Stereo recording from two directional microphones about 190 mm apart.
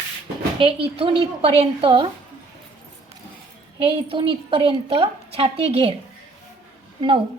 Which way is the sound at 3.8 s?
30° right (ahead or behind).